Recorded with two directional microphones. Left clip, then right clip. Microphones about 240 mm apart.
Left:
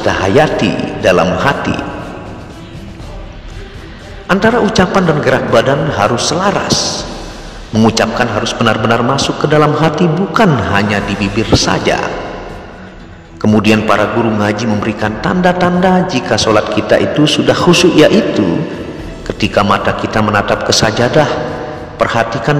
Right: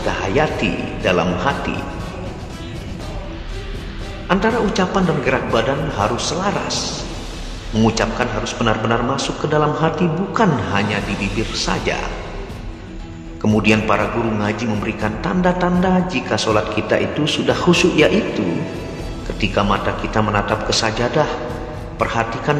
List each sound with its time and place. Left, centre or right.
0.0 s a man's voice: left
4.3 s a man's voice: left
13.4 s a man's voice: left